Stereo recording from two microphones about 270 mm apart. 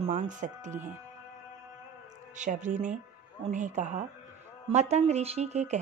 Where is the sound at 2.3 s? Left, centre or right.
Right.